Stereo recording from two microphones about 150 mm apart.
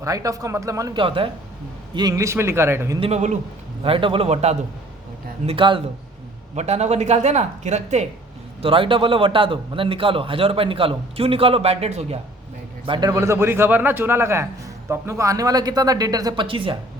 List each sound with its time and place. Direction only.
0.0 s speech: 20° right (ahead or behind)
1.0 s a man's voice: 35° right (ahead or behind)
2.0 s a man's voice: 25° right (ahead or behind)
3.0 s speech: 50° right (ahead or behind)
3.8 s a man's voice: 35° right (ahead or behind)
5.5 s a man's voice: 35° right (ahead or behind)
6.6 s speech: 50° right (ahead or behind)
8.6 s a man's voice: 35° right (ahead or behind)
12.8 s a man's voice: 30° right (ahead or behind)